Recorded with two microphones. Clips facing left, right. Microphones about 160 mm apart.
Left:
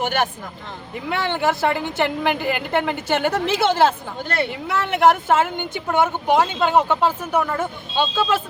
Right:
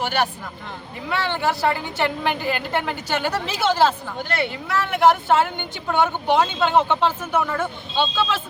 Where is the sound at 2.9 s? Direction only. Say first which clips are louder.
Left 3 dB; 55° left (ahead or behind).